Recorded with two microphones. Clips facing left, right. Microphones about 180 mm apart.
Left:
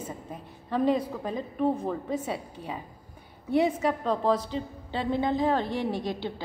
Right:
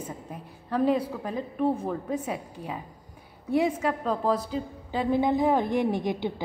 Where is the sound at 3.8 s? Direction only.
5° right (ahead or behind).